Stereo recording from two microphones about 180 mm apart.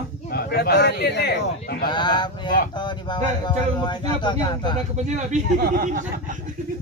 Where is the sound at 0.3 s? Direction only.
60° left (ahead or behind).